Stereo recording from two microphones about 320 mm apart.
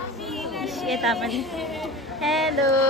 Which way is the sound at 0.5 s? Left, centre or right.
Centre.